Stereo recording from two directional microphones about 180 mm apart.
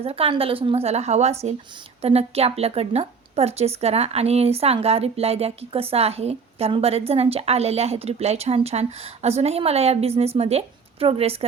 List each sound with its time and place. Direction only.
0.0 s a woman's voice: 35° right (ahead or behind)